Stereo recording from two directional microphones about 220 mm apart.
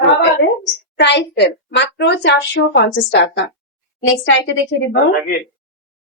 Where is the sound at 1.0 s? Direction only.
50° left (ahead or behind).